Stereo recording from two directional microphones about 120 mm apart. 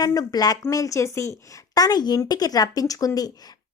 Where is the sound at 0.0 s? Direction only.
30° left (ahead or behind).